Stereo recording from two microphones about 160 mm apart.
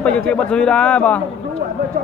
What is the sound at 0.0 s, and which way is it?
A man's voice, 5° left (ahead or behind).